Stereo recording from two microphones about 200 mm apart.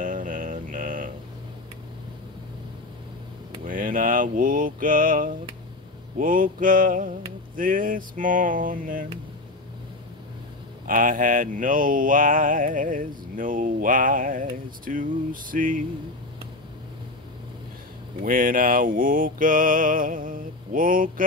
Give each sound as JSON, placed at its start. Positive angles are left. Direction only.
{"t": 0.0, "sound": "a sound", "side_deg": -40}
{"t": 3.6, "sound": "mantra", "side_deg": -45}
{"t": 10.9, "sound": "mantra", "side_deg": -45}
{"t": 18.2, "sound": "mantra", "side_deg": -45}